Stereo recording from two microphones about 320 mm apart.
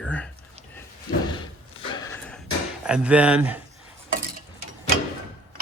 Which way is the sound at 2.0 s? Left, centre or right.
Centre.